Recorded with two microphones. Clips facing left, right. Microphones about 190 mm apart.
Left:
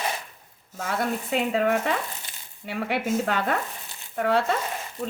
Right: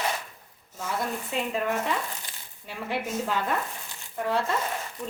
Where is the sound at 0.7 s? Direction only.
75° left (ahead or behind).